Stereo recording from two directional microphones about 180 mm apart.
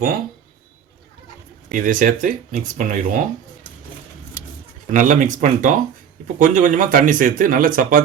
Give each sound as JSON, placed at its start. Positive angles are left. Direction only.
{"t": 1.7, "sound": "speech", "side_deg": -50}
{"t": 4.9, "sound": "speech", "side_deg": -45}